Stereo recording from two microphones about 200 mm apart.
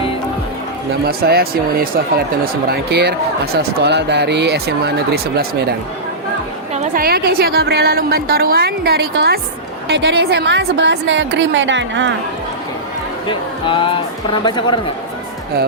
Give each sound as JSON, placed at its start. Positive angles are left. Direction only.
{"t": 1.0, "sound": "speech", "side_deg": -50}
{"t": 6.7, "sound": "a woman's voice", "side_deg": -40}
{"t": 13.2, "sound": "speech", "side_deg": 25}